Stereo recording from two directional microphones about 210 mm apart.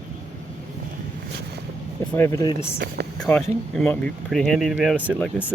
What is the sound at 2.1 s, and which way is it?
Speech, 15° left (ahead or behind).